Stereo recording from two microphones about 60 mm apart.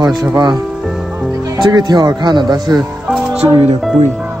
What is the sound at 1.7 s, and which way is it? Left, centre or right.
Speech, right.